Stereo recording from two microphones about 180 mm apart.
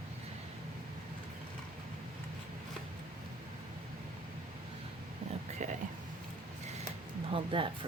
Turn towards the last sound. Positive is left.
turn(degrees=-30)  # may be behind; listen again after turning